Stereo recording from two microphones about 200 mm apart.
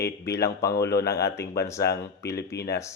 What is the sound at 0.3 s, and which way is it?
Speech, 55° left (ahead or behind).